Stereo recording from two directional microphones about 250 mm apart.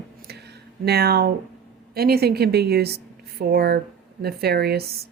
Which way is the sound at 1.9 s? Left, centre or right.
Right.